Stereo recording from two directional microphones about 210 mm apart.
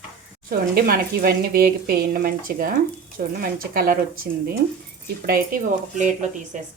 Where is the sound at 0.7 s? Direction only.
45° right (ahead or behind).